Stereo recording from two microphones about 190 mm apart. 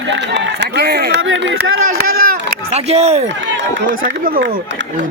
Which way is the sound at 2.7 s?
35° right (ahead or behind).